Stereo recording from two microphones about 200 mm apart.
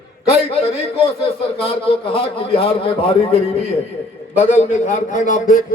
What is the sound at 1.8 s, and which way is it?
A man's voice, 25° left (ahead or behind).